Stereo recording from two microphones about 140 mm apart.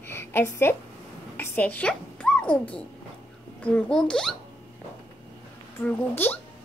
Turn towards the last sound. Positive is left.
turn(degrees=15)  # may be behind; listen again after turning